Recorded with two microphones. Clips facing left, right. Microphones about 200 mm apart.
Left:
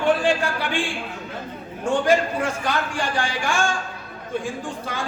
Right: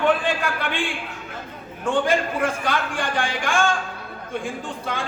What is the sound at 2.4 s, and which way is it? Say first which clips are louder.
Speech: right 1 dB; 55° right (ahead or behind).